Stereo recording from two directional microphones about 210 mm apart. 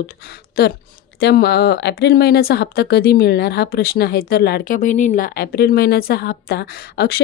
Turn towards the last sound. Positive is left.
turn(degrees=45)  # may be behind; listen again after turning